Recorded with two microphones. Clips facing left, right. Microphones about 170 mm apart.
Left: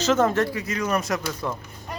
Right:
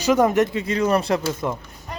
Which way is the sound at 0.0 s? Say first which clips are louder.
Right 3 dB; 15° right (ahead or behind).